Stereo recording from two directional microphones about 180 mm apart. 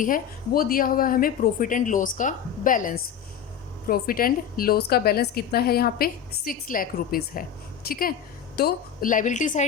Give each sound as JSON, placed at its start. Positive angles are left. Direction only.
{"t": 0.0, "sound": "a woman's voice", "side_deg": 50}